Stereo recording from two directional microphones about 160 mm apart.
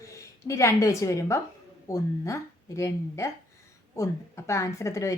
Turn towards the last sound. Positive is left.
turn(degrees=20)  # may be behind; listen again after turning